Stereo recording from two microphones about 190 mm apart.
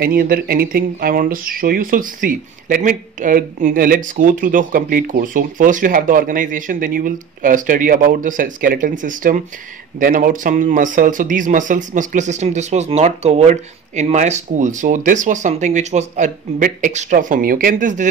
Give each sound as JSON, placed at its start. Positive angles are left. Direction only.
{"t": 0.0, "sound": "speech", "side_deg": -50}